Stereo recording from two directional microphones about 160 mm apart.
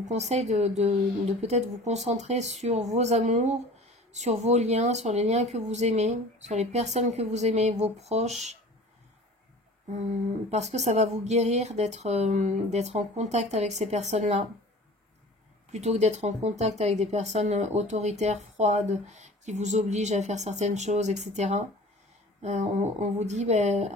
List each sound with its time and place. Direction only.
0.0 s speech: 45° right (ahead or behind)
10.5 s speech: 45° right (ahead or behind)
15.7 s speech: 45° right (ahead or behind)